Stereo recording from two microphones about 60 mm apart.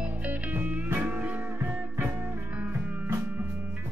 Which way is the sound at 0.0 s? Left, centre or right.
Right.